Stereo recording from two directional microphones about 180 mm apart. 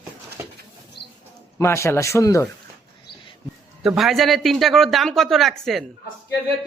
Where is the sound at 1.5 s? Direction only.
15° left (ahead or behind).